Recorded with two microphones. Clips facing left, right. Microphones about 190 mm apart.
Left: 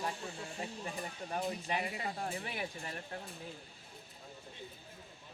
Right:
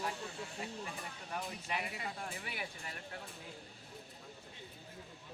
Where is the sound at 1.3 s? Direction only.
30° left (ahead or behind).